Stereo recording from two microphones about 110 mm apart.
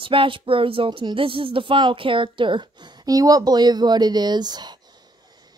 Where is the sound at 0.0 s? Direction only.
50° right (ahead or behind).